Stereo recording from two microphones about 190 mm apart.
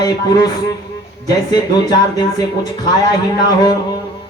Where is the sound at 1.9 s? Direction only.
20° left (ahead or behind).